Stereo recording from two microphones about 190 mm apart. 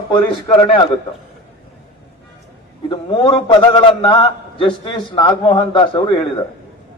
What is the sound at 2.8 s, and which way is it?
A man's voice, 25° left (ahead or behind).